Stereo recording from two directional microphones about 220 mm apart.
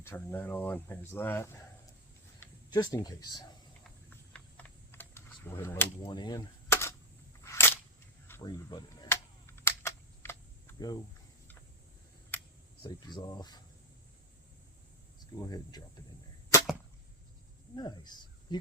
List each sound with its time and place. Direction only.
0.0 s speech: 10° left (ahead or behind)
3.8 s typing: 5° left (ahead or behind)
6.1 s a sound: 20° left (ahead or behind)
12.8 s speech: 20° left (ahead or behind)
15.4 s speech: 15° left (ahead or behind)
17.7 s speech: 20° left (ahead or behind)